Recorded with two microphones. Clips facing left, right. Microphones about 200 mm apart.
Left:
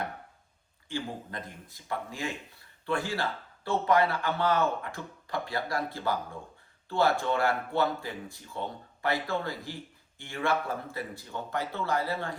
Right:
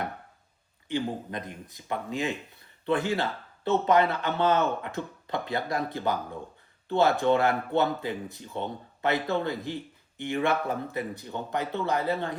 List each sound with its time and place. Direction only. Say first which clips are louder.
0.9 s speech: right 6 dB; 20° right (ahead or behind)